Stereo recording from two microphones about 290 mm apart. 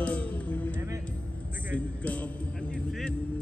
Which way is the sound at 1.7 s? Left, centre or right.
Centre.